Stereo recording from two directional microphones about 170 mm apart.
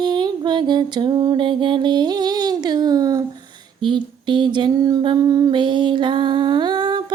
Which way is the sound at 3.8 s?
30° right (ahead or behind).